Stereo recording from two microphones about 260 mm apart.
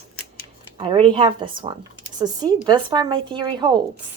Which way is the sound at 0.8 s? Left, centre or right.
Centre.